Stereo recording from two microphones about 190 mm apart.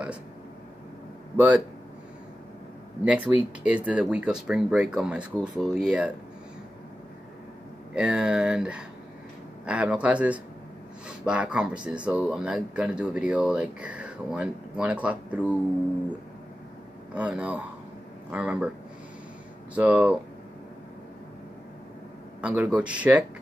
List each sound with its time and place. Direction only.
1.3 s speech: 10° right (ahead or behind)
3.3 s speech: centre (ahead or behind)
7.9 s speech: 5° right (ahead or behind)
17.1 s speech: 5° right (ahead or behind)
19.7 s speech: 10° right (ahead or behind)
22.4 s speech: 5° right (ahead or behind)